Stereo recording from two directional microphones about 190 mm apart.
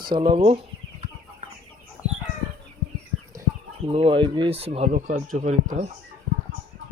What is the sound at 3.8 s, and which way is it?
Speech, 30° right (ahead or behind).